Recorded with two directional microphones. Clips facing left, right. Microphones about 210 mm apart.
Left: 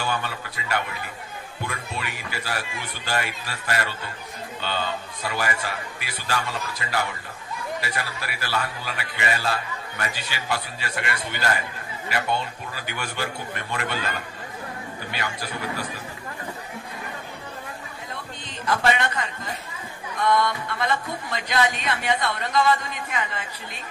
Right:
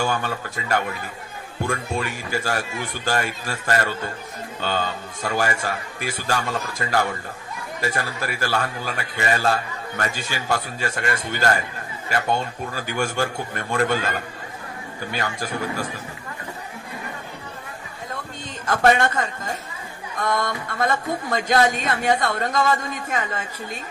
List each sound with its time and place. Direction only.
0.0 s a man's voice: 45° right (ahead or behind)
18.7 s a man's voice: 45° right (ahead or behind)